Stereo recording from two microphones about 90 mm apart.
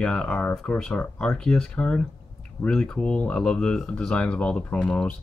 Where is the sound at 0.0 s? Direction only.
10° left (ahead or behind).